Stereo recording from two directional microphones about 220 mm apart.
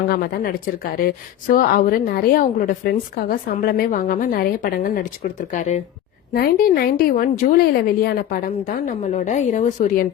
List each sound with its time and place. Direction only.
0.1 s speech: 45° left (ahead or behind)